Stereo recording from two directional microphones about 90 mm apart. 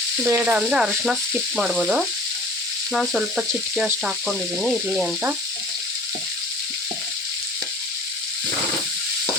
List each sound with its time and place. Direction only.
0.3 s frying: 30° right (ahead or behind)
0.5 s frying: 10° right (ahead or behind)
3.2 s frying: 15° right (ahead or behind)